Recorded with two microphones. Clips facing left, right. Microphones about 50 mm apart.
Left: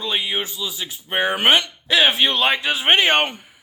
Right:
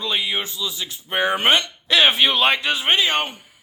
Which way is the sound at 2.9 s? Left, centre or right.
Left.